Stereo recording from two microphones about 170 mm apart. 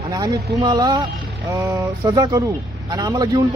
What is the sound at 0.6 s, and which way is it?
A man's voice, 25° right (ahead or behind).